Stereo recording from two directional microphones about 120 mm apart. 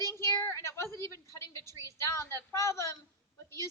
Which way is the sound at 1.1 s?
30° right (ahead or behind).